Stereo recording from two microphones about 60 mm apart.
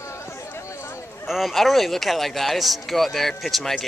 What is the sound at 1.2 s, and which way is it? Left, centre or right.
Speech, centre.